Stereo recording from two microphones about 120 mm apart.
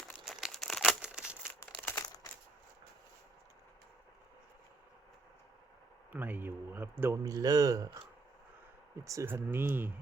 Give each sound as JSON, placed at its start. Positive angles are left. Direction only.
{"t": 0.3, "sound": "crumpling", "side_deg": 0}
{"t": 1.0, "sound": "a sound", "side_deg": -5}
{"t": 1.8, "sound": "crumpling", "side_deg": 20}
{"t": 6.1, "sound": "speech", "side_deg": -15}
{"t": 7.2, "sound": "a man's voice", "side_deg": -30}
{"t": 9.0, "sound": "speech", "side_deg": -25}